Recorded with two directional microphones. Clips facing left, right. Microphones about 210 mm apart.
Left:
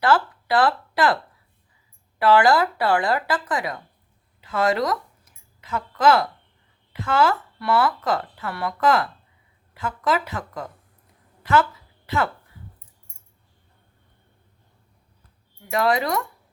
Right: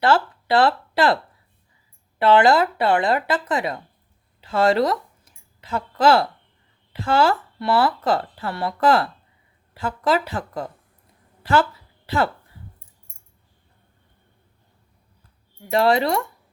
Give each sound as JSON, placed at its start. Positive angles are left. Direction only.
{"t": 0.0, "sound": "a woman's voice", "side_deg": -25}
{"t": 15.7, "sound": "speech", "side_deg": -30}